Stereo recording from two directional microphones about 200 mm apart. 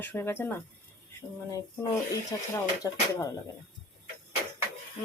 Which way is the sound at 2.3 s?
20° left (ahead or behind).